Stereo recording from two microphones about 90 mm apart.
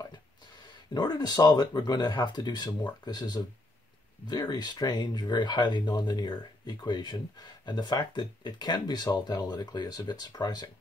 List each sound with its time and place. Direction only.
0.9 s speech: 50° left (ahead or behind)